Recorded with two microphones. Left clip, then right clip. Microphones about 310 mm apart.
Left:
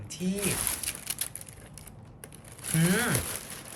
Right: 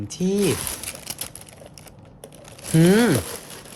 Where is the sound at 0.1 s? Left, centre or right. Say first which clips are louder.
Right 10 dB; centre.